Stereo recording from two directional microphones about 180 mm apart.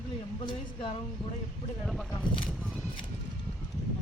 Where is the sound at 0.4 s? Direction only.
25° left (ahead or behind).